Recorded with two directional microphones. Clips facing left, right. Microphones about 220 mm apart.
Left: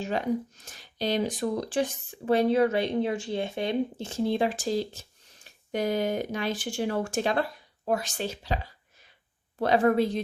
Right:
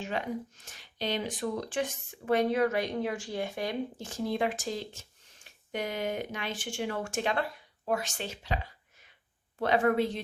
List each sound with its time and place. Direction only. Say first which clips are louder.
0.0 s speech: left 6 dB; 40° left (ahead or behind)
9.6 s speech: left 4 dB; 35° left (ahead or behind)